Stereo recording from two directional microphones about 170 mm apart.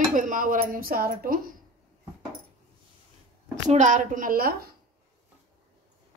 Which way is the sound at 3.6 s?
45° right (ahead or behind).